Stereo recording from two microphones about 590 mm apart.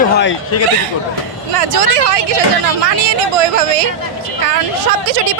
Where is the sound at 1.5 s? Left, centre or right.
Right.